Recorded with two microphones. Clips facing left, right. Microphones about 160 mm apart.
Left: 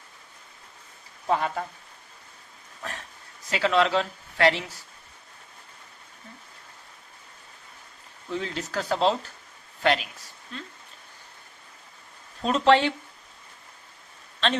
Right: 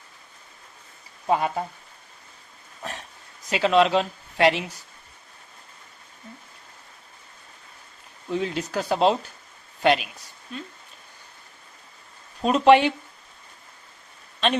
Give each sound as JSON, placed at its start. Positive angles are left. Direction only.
{"t": 1.3, "sound": "speech", "side_deg": -20}
{"t": 2.8, "sound": "a sound", "side_deg": -20}
{"t": 3.5, "sound": "speech", "side_deg": -20}
{"t": 8.3, "sound": "a woman's voice", "side_deg": -15}
{"t": 12.4, "sound": "speech", "side_deg": -15}